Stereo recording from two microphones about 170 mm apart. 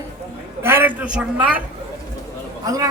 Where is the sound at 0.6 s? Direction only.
15° right (ahead or behind).